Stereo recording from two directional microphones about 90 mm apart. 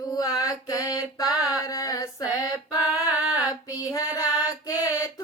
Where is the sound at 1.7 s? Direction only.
45° left (ahead or behind).